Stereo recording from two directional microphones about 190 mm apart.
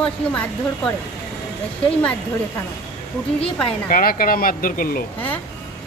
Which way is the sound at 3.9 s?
50° left (ahead or behind).